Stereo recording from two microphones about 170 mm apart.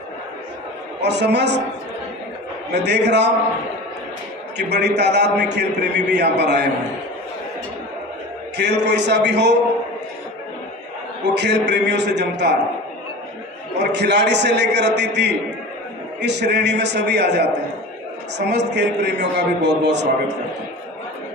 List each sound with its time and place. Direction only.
1.0 s a man's voice: 90° right
2.7 s a man's voice: 90° right
4.5 s a man's voice: 85° right
8.5 s a man's voice: 85° right
11.3 s a man's voice: 90° right
13.7 s a man's voice: 90° right